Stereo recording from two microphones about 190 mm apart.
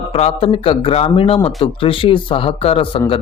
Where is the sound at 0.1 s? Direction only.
30° left (ahead or behind).